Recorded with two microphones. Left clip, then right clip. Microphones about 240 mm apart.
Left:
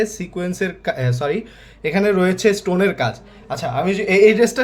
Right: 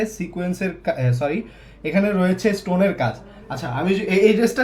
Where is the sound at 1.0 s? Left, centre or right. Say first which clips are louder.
Left 2 dB; left.